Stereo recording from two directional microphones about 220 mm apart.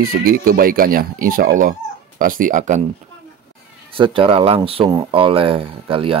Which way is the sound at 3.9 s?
25° right (ahead or behind).